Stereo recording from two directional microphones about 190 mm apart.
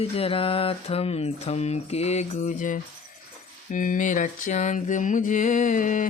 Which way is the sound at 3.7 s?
45° left (ahead or behind).